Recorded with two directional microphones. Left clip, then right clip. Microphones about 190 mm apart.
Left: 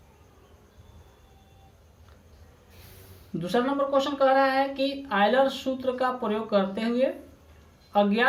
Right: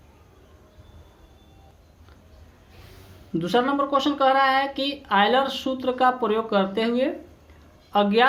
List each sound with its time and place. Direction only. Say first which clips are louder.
3.3 s speech: right 4 dB; 30° right (ahead or behind)